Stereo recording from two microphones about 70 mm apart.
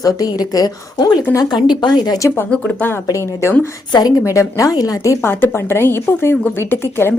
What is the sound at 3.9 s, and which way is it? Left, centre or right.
Speech, left.